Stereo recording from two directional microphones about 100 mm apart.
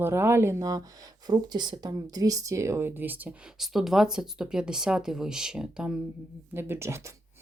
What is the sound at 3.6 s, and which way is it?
Speech, 5° right (ahead or behind).